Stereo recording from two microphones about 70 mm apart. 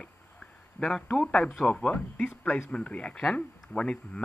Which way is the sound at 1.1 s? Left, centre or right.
Centre.